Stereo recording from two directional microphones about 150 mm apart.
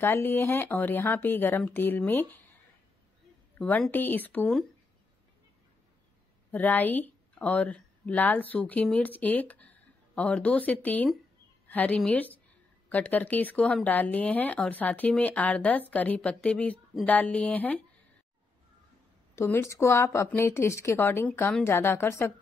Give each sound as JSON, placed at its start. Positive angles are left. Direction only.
{"t": 0.0, "sound": "speech", "side_deg": 15}
{"t": 3.5, "sound": "speech", "side_deg": 10}
{"t": 6.5, "sound": "a woman's voice", "side_deg": 10}
{"t": 19.3, "sound": "speech", "side_deg": 15}